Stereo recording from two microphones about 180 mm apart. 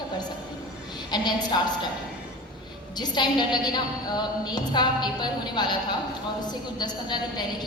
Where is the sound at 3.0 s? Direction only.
25° left (ahead or behind).